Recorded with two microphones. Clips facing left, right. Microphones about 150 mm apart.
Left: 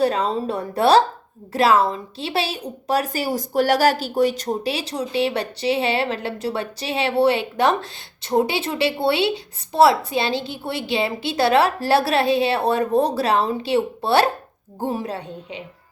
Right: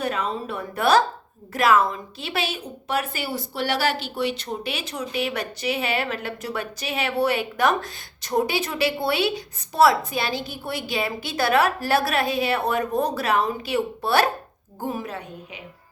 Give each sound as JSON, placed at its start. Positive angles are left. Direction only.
{"t": 0.0, "sound": "a woman's voice", "side_deg": 35}